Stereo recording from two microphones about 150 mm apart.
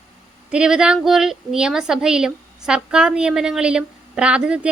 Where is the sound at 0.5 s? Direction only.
5° right (ahead or behind).